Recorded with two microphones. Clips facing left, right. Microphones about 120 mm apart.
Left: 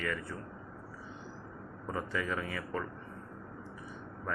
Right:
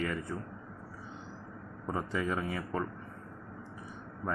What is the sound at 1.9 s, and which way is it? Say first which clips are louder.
Speech: right 2 dB; 20° right (ahead or behind).